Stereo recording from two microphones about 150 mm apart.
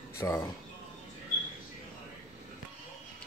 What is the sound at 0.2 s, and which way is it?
Speech, 20° left (ahead or behind).